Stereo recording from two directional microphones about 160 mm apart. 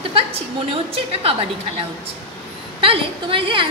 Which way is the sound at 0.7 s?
35° right (ahead or behind).